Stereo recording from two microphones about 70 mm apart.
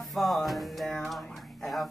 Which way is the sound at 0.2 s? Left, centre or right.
Centre.